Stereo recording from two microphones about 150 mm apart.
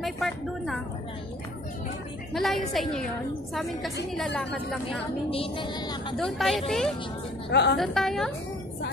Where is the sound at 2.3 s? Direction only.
Centre (ahead or behind).